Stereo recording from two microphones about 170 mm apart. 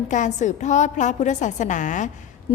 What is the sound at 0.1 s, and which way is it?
A woman's voice, 45° left (ahead or behind).